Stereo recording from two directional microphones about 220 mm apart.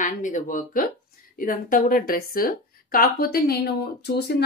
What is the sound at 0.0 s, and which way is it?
A woman's voice, 35° left (ahead or behind).